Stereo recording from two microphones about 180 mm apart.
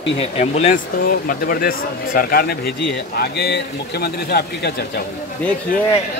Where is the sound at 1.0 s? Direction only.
50° left (ahead or behind).